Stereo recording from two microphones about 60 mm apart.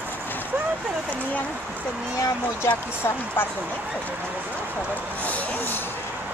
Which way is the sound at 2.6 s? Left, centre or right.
Left.